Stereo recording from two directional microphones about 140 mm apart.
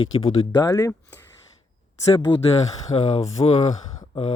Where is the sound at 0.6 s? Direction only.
25° left (ahead or behind).